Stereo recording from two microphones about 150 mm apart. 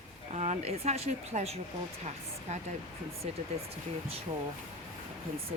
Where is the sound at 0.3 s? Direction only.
45° right (ahead or behind).